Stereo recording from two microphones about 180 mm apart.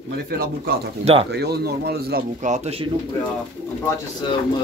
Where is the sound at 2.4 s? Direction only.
40° right (ahead or behind).